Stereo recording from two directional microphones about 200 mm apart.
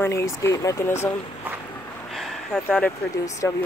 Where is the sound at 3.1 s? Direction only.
15° left (ahead or behind).